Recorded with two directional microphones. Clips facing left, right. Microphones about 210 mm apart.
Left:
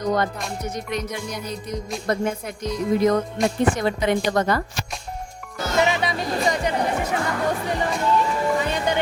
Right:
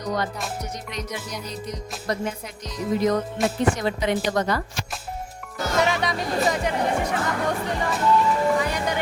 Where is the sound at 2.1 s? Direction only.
50° left (ahead or behind).